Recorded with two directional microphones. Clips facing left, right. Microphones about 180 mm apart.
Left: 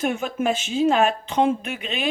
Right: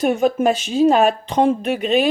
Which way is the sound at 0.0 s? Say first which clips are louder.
Right 7 dB; 35° right (ahead or behind).